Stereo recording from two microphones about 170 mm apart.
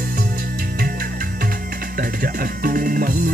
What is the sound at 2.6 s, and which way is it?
Music, 55° right (ahead or behind).